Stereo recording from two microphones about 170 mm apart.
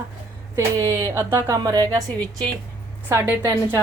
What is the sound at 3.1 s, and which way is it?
Speech, 15° right (ahead or behind).